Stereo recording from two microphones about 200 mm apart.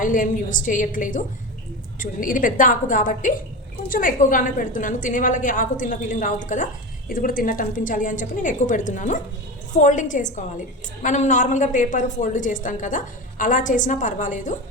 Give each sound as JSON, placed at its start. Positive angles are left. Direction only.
{"t": 0.0, "sound": "a woman's voice", "side_deg": 40}